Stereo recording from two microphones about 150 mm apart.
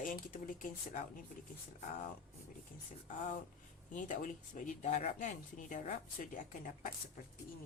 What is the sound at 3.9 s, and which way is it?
Speech, 60° left (ahead or behind).